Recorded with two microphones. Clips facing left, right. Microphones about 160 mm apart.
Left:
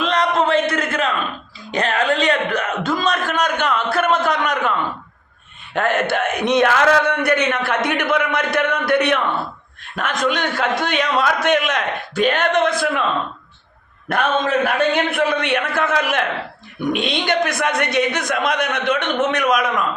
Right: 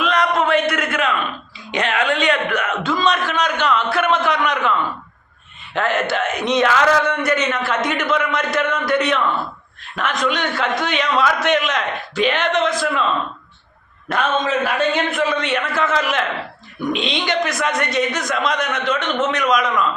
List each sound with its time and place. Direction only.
0.0 s a sound: 30° left (ahead or behind)
5.7 s speech: 50° left (ahead or behind)
9.9 s a man's voice: 50° left (ahead or behind)
14.1 s speech: 55° left (ahead or behind)